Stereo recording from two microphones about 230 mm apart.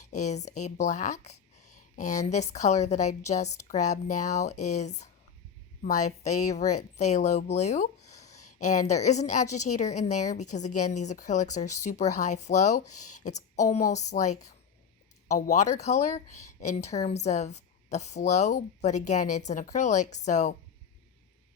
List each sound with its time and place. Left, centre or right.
0.1 s a woman's voice: left
6.1 s a woman's voice: left
6.7 s speech: left
7.0 s speech: left
8.1 s a sound: centre
8.5 s a woman's voice: left
15.4 s a woman's voice: left